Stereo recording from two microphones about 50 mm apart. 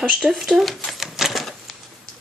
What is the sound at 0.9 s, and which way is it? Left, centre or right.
Typewriter, centre.